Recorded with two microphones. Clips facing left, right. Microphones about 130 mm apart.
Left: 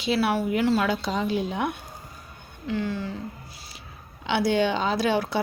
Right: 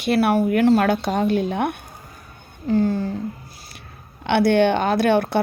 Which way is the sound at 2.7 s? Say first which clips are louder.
Right 8 dB; 45° right (ahead or behind).